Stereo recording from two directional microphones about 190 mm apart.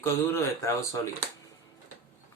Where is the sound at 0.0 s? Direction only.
15° left (ahead or behind).